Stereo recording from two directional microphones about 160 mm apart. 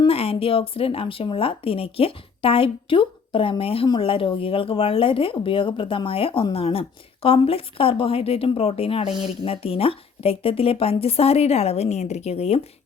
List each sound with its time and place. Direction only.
0.1 s speech: 35° left (ahead or behind)